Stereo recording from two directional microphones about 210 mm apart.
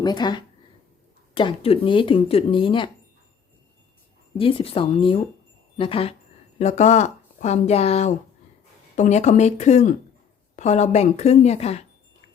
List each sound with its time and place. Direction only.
0.0 s speech: 20° left (ahead or behind)
4.4 s a woman's voice: 25° left (ahead or behind)